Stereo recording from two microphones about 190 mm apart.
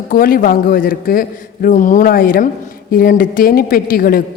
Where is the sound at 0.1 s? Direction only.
50° left (ahead or behind).